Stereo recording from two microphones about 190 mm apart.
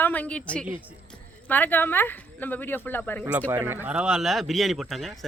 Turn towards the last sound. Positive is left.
turn(degrees=0)  # may be behind; listen again after turning